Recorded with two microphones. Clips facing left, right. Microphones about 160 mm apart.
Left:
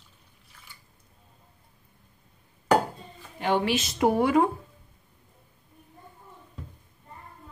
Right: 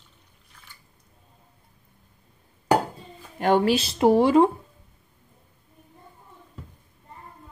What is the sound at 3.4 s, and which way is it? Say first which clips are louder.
Speech: right 5 dB; 50° right (ahead or behind).